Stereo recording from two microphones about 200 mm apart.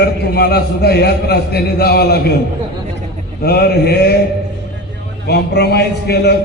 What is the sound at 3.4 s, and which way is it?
Speech, 55° left (ahead or behind).